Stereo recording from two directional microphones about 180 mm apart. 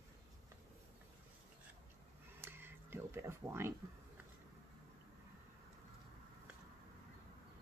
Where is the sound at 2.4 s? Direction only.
10° right (ahead or behind).